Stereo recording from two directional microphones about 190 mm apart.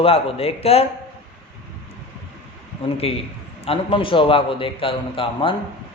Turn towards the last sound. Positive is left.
turn(degrees=30)  # may be behind; listen again after turning